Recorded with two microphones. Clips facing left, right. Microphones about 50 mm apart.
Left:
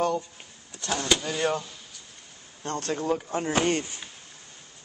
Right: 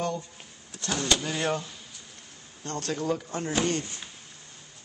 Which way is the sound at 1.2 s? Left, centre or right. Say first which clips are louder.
Left 2 dB; centre.